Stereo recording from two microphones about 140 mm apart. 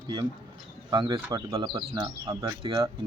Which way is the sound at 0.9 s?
30° right (ahead or behind).